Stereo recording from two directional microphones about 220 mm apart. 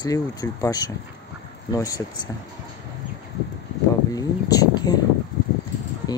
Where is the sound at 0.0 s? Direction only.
15° left (ahead or behind).